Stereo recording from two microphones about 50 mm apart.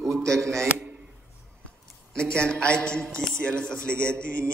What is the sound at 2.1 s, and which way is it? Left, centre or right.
A man's voice, centre.